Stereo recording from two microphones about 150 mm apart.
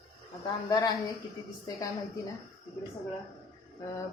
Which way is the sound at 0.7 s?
25° left (ahead or behind).